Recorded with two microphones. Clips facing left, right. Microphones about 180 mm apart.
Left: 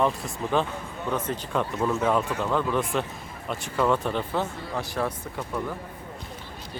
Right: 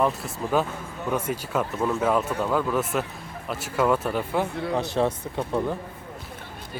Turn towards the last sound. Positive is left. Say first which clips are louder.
# right 5 dB
turn(degrees=-25)  # may be behind; listen again after turning